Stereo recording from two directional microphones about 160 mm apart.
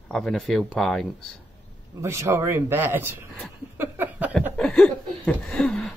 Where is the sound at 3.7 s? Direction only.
15° right (ahead or behind).